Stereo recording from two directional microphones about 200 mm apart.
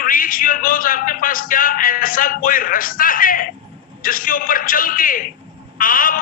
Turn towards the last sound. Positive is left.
turn(degrees=45)  # may be behind; listen again after turning